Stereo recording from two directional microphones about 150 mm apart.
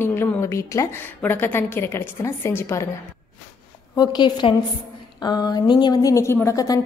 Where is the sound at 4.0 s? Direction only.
30° left (ahead or behind).